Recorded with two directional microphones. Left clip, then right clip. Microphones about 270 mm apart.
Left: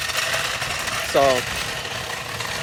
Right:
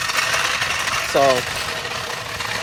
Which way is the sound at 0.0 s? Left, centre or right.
Right.